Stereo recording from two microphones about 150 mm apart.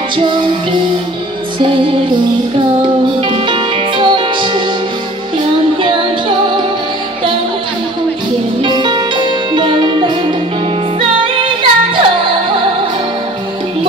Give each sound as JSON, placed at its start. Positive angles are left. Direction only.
{"t": 0.2, "sound": "music", "side_deg": -35}
{"t": 3.2, "sound": "music", "side_deg": -35}
{"t": 5.8, "sound": "music", "side_deg": -35}
{"t": 8.6, "sound": "music", "side_deg": -30}